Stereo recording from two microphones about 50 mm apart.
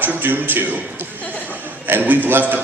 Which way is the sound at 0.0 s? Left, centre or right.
Right.